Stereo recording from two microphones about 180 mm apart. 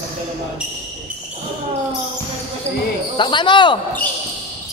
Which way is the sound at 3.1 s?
25° left (ahead or behind).